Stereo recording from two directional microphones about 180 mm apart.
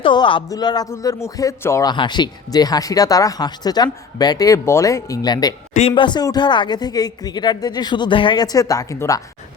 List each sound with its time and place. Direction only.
0.0 s a man's voice: 25° left (ahead or behind)